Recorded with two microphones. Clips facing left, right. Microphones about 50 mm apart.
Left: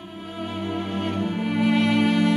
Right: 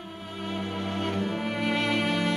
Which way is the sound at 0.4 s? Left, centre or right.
Centre.